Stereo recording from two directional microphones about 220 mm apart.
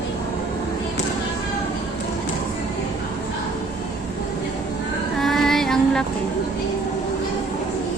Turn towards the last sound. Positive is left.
turn(degrees=5)  # may be behind; listen again after turning